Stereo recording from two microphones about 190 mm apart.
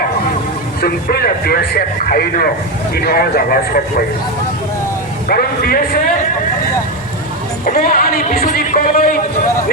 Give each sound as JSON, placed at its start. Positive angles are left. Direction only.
{"t": 0.8, "sound": "a man's voice", "side_deg": 55}
{"t": 5.3, "sound": "a man's voice", "side_deg": 50}
{"t": 7.6, "sound": "a man's voice", "side_deg": 50}